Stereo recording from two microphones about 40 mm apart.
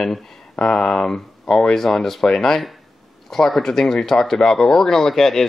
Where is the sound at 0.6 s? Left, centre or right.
Left.